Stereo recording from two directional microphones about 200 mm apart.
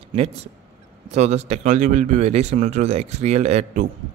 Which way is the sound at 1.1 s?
35° right (ahead or behind).